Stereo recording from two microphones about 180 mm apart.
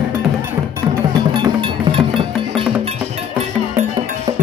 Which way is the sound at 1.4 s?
25° right (ahead or behind).